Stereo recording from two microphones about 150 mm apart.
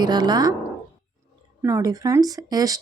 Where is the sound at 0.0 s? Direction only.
30° right (ahead or behind).